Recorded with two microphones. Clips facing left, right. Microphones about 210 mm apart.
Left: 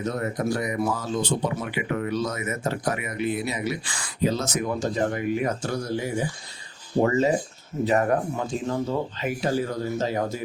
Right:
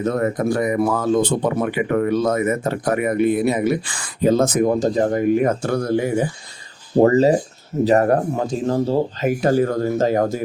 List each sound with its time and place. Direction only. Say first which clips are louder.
0.0 s speech: right 7 dB; 55° right (ahead or behind)
6.9 s speech: right 7 dB; 35° right (ahead or behind)
9.4 s speech: right 8 dB; 50° right (ahead or behind)